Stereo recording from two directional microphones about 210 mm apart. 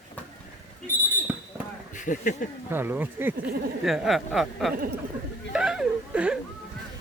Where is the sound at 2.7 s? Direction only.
10° right (ahead or behind).